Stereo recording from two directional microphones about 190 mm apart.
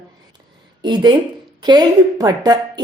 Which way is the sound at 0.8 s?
25° right (ahead or behind).